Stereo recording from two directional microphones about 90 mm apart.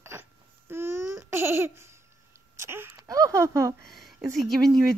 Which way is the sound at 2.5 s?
25° right (ahead or behind).